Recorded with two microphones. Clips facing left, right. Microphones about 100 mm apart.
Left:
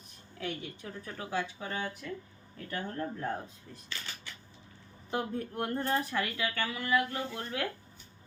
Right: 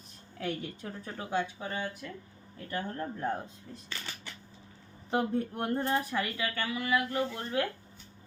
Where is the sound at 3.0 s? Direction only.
20° right (ahead or behind).